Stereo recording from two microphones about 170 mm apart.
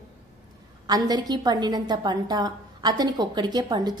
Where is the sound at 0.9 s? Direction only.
20° right (ahead or behind).